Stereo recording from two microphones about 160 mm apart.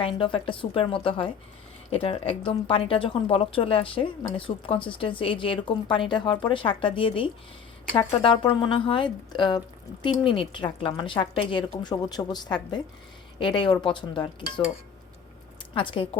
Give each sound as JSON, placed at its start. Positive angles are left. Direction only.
{"t": 0.2, "sound": "a woman's voice", "side_deg": 30}
{"t": 15.7, "sound": "speech", "side_deg": 30}